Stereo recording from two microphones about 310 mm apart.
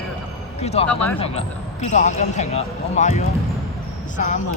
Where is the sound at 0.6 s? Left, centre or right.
Centre.